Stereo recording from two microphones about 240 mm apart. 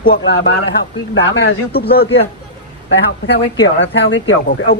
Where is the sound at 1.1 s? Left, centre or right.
Left.